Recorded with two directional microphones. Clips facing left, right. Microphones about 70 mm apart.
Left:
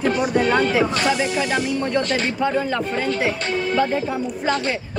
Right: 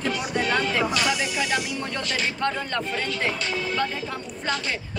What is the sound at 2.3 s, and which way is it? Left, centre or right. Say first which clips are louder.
Speech: left 6 dB; centre.